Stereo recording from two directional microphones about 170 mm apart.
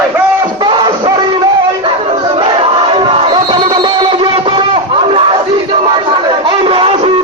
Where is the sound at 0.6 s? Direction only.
25° right (ahead or behind).